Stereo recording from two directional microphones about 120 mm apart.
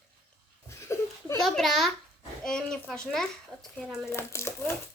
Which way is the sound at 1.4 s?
Centre (ahead or behind).